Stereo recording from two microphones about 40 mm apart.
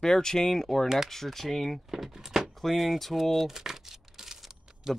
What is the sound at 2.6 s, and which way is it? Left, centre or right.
Crumpling, centre.